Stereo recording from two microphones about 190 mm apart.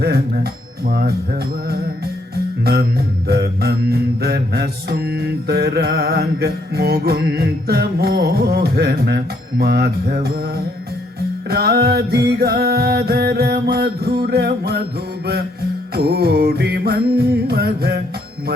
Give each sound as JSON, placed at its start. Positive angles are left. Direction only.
{"t": 0.0, "sound": "mantra", "side_deg": -55}
{"t": 2.3, "sound": "music", "side_deg": -55}
{"t": 3.2, "sound": "mantra", "side_deg": -55}
{"t": 11.4, "sound": "music", "side_deg": -55}
{"t": 16.0, "sound": "music", "side_deg": -55}